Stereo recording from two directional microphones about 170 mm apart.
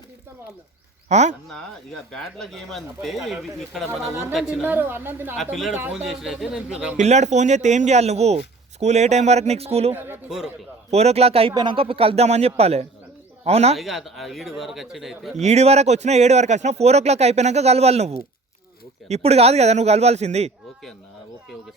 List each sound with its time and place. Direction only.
1.0 s speech: 45° right (ahead or behind)
1.5 s a woman's voice: centre (ahead or behind)
5.4 s speech: centre (ahead or behind)
6.9 s speech: 40° right (ahead or behind)
9.9 s a woman's voice: 10° right (ahead or behind)
10.9 s a man's voice: 40° right (ahead or behind)
13.7 s speech: centre (ahead or behind)
15.4 s speech: 40° right (ahead or behind)